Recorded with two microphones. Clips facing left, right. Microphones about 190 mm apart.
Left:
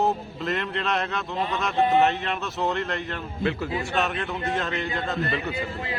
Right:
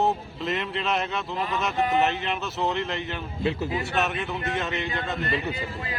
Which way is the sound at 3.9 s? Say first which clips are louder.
Even; 5° right (ahead or behind).